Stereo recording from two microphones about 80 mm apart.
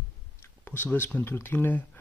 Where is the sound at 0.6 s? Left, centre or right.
Left.